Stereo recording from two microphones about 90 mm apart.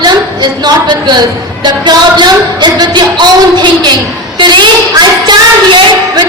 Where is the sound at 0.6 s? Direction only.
55° right (ahead or behind).